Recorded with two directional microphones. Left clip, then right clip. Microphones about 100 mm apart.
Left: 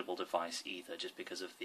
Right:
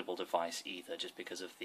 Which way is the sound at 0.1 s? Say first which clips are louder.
Right 2 dB; 30° right (ahead or behind).